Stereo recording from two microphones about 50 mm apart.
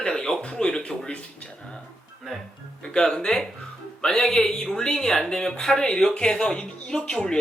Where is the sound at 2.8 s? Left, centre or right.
Centre.